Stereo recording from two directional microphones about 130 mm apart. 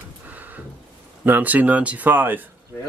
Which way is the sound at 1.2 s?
15° right (ahead or behind).